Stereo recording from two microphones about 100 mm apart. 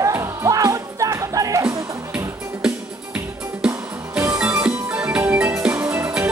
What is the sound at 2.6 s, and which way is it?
Music, 10° right (ahead or behind).